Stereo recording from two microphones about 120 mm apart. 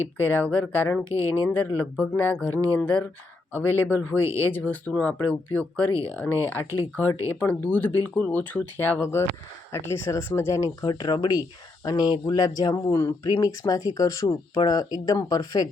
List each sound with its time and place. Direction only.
0.3 s speech: 15° left (ahead or behind)
1.0 s speech: 25° right (ahead or behind)
1.5 s speech: 15° left (ahead or behind); by 15.7 s 30° left (ahead or behind)